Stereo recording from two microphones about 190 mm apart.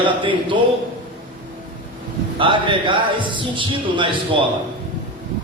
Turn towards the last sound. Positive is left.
turn(degrees=-25)  # may be behind; listen again after turning